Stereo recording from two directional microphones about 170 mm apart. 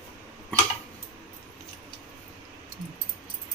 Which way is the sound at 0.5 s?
10° left (ahead or behind).